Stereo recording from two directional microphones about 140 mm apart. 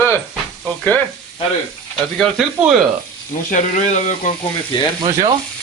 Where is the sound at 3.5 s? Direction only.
60° left (ahead or behind).